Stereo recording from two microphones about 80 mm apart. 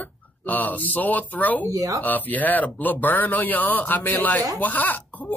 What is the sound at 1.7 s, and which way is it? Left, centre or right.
Speech, right.